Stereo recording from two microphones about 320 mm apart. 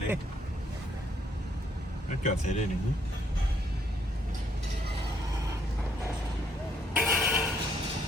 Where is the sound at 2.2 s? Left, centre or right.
Left.